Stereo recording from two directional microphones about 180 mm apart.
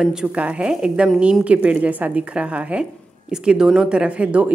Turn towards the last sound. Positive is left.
turn(degrees=-10)  # may be behind; listen again after turning